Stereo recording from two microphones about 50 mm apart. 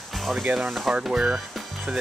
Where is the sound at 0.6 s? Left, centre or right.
Centre.